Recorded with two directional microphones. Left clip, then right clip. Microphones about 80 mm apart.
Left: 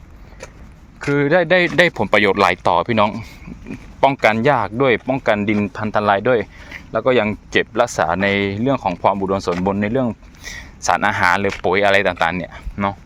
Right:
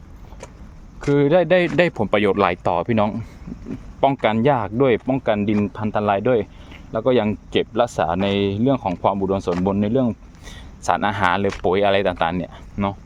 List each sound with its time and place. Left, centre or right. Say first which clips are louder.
1.1 s speech: left 1 dB; right
2.0 s speech: left 3 dB; centre; by 3.1 s right
4.4 s speech: left 2 dB; right
5.2 s speech: left 3 dB; right
7.3 s speech: left 3 dB; right
10.6 s a sound: left 3 dB; right
11.1 s speech: left 3 dB; right
12.4 s speech: left 3 dB; right